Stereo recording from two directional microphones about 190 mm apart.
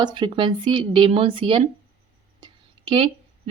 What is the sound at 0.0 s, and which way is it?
A woman's voice, 25° right (ahead or behind).